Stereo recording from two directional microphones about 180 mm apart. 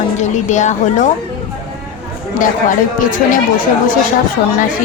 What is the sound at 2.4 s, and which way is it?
Speech, 50° left (ahead or behind).